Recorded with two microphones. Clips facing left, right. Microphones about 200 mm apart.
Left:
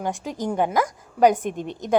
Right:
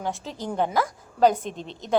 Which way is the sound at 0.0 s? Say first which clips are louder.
Left 4 dB; 15° left (ahead or behind).